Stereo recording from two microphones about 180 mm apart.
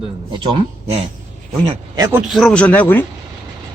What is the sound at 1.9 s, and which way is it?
Speech, 20° right (ahead or behind).